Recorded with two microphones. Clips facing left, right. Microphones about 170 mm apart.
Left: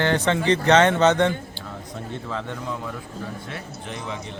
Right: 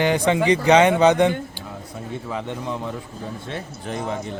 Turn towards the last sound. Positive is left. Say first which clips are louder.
# right 5 dB
turn(degrees=-45)  # may be behind; listen again after turning